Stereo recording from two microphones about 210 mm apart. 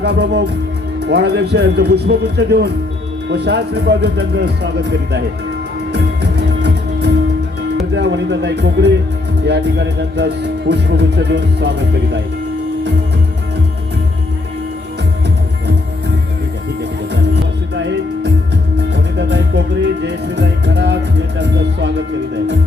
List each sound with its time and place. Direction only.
0.0 s speech: 50° right (ahead or behind)
6.6 s music: 50° right (ahead or behind)
7.9 s speech: 55° right (ahead or behind)
20.1 s speech: 55° right (ahead or behind)